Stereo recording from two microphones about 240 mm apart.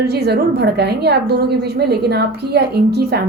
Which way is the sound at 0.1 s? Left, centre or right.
Right.